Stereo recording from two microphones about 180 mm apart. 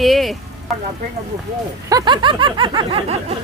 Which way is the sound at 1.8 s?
20° right (ahead or behind).